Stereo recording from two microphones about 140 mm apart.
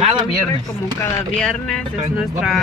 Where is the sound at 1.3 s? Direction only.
5° left (ahead or behind).